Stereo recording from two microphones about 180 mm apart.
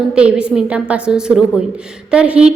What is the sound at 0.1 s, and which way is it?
A woman's voice, 5° right (ahead or behind).